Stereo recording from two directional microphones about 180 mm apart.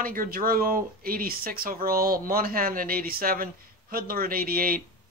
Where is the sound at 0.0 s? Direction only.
50° right (ahead or behind).